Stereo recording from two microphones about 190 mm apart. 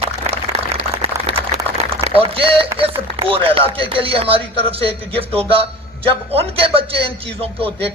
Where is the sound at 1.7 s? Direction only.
30° right (ahead or behind).